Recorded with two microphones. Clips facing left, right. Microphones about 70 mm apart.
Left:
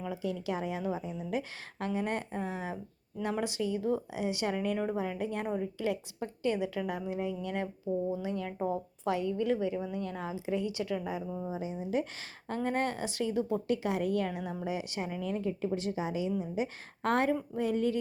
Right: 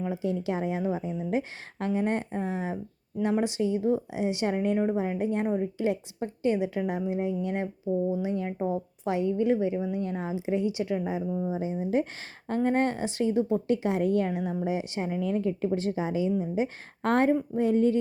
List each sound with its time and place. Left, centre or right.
0.0 s speech: right
8.5 s speech: centre
11.3 s speech: centre
11.5 s speech: right